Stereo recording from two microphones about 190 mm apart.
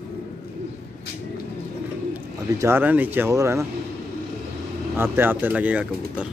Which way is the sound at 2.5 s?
10° right (ahead or behind).